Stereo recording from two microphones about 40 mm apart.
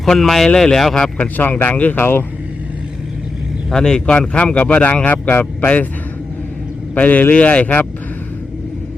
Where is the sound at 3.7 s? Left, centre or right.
Left.